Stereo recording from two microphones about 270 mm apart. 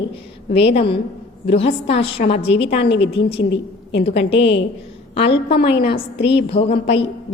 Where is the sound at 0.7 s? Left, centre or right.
Left.